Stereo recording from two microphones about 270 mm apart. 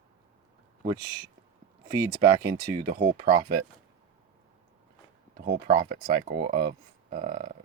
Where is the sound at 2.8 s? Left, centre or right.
Right.